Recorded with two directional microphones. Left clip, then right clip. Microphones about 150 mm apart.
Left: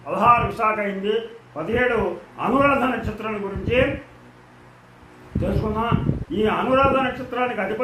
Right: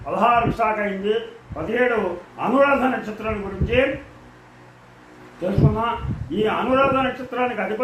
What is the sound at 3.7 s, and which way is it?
Speech, 20° left (ahead or behind).